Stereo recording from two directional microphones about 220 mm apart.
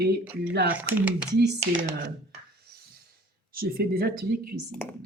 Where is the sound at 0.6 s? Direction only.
5° right (ahead or behind).